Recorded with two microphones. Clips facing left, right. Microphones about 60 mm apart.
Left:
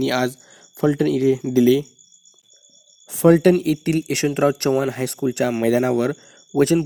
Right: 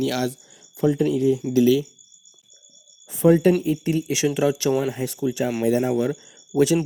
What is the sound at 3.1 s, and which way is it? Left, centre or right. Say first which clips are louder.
Speech: left 3 dB; left.